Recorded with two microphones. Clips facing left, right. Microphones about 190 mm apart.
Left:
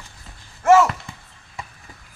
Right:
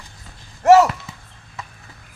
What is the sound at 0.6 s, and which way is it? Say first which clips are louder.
Speech: right 3 dB; 35° right (ahead or behind).